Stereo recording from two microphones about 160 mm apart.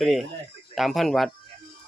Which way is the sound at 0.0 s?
Centre (ahead or behind).